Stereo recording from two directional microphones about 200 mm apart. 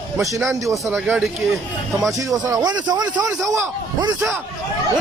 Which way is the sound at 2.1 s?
15° right (ahead or behind).